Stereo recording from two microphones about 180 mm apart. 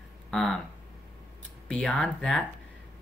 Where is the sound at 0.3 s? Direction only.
Centre (ahead or behind).